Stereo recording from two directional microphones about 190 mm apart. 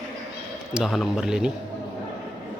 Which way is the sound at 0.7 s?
Centre (ahead or behind).